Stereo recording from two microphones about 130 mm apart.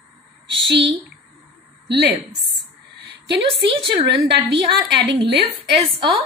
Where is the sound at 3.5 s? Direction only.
45° right (ahead or behind).